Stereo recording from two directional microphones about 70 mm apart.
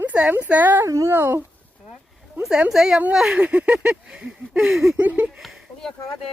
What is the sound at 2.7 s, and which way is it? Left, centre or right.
A woman's voice, centre.